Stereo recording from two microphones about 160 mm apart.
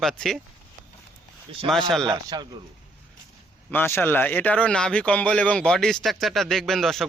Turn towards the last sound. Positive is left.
turn(degrees=0)  # may be behind; listen again after turning